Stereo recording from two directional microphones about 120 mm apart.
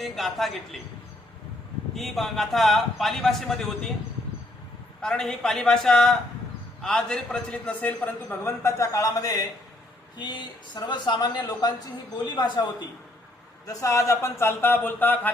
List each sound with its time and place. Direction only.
0.0 s a man's voice: centre (ahead or behind)
2.0 s a man's voice: centre (ahead or behind)
4.9 s a man's voice: 5° left (ahead or behind); by 12.6 s 35° left (ahead or behind)
13.7 s speech: 25° left (ahead or behind)